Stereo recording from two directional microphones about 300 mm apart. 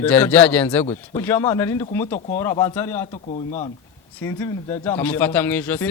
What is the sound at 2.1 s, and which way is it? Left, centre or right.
Speech, left.